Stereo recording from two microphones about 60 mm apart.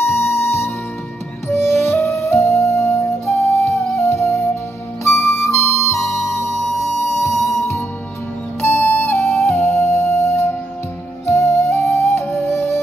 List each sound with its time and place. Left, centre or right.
0.0 s music: left
1.8 s flute: left
4.0 s music: left
5.9 s music: centre
8.5 s music: left
9.1 s music: centre
9.7 s music: left